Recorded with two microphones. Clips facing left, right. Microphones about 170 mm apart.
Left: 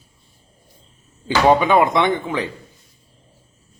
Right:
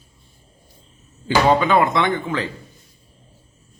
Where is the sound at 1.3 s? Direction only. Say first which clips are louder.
Left 1 dB; 15° left (ahead or behind).